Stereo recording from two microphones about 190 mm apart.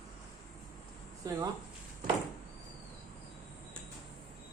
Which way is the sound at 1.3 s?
20° right (ahead or behind).